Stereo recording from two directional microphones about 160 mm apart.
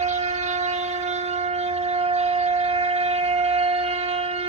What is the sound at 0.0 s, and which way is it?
Train, 45° right (ahead or behind).